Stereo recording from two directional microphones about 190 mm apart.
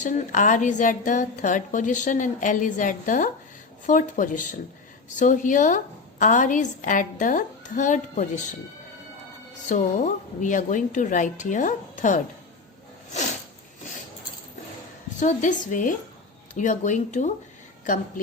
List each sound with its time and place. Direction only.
0.0 s a woman's voice: 40° left (ahead or behind)
9.6 s a woman's voice: 40° left (ahead or behind)
15.2 s a woman's voice: 40° left (ahead or behind)